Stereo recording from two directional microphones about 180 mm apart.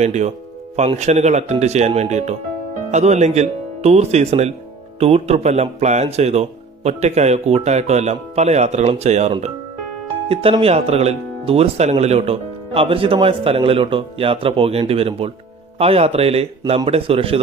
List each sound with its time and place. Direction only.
0.0 s speech: 40° right (ahead or behind)